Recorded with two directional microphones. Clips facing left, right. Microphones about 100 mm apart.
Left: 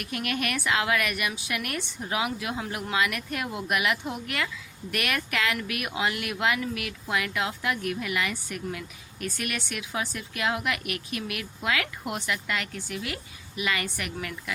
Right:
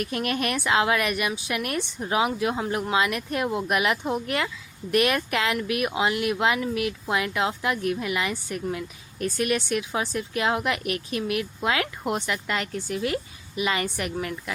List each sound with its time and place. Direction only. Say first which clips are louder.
0.0 s a woman's voice: right 4 dB; 35° right (ahead or behind)